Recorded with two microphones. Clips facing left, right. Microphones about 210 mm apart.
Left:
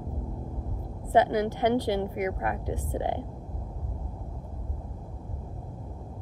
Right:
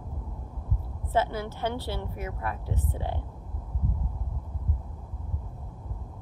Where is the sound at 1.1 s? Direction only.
15° left (ahead or behind).